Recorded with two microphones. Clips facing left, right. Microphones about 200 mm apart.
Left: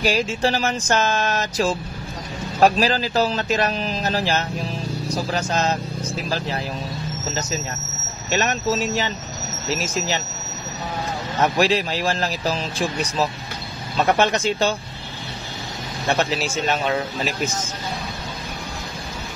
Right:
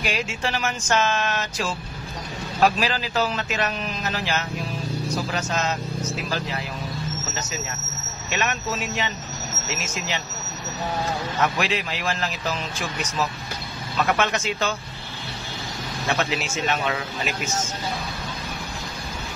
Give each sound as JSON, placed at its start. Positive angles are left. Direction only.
{"t": 0.0, "sound": "speech", "side_deg": 35}
{"t": 8.3, "sound": "speech", "side_deg": 35}
{"t": 11.4, "sound": "speech", "side_deg": 35}
{"t": 16.1, "sound": "speech", "side_deg": 35}